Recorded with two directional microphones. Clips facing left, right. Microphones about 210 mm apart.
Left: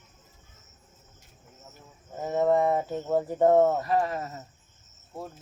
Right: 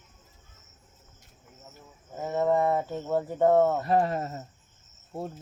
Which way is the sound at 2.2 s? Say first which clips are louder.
Left 1 dB; 15° left (ahead or behind).